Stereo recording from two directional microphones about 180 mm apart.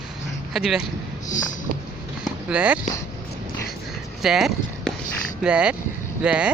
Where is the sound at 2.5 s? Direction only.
5° right (ahead or behind).